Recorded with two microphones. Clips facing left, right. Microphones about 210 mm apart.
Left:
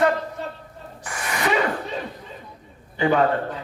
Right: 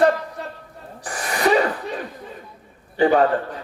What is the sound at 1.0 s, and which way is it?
Gasp, 35° right (ahead or behind).